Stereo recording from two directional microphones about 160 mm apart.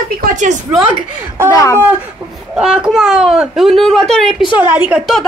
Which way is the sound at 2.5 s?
5° right (ahead or behind).